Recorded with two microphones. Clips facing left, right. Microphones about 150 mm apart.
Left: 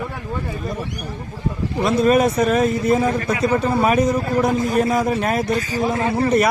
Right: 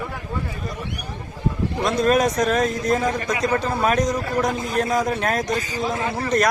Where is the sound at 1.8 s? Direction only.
5° left (ahead or behind).